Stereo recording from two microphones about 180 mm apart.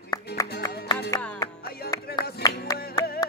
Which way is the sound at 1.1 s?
20° left (ahead or behind).